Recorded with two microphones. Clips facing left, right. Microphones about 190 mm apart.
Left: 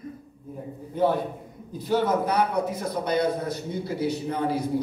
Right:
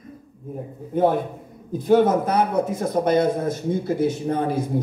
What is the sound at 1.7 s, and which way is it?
A man's voice, 50° right (ahead or behind).